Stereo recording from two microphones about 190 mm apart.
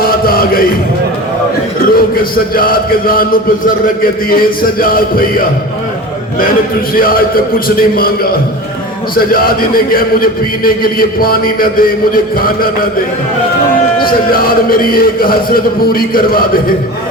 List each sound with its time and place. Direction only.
0.0 s chant: 50° left (ahead or behind)
1.8 s a man's voice: 50° left (ahead or behind)
6.9 s a man's voice: 50° left (ahead or behind)
14.0 s a man's voice: 50° left (ahead or behind)